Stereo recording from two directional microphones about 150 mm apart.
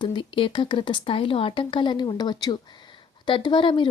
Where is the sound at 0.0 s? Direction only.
35° left (ahead or behind).